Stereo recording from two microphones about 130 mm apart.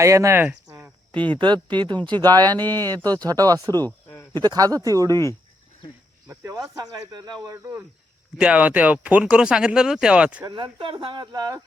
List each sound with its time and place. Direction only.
0.0 s speech: 25° right (ahead or behind)
1.4 s speech: 35° right (ahead or behind)
2.6 s speech: 15° left (ahead or behind)
2.8 s speech: 30° right (ahead or behind)
3.8 s a sound: 15° left (ahead or behind)
4.4 s speech: 30° right (ahead or behind)
6.2 s speech: 25° right (ahead or behind)
7.4 s speech: 20° right (ahead or behind)
8.4 s speech: 10° right (ahead or behind)
10.4 s speech: 35° right (ahead or behind)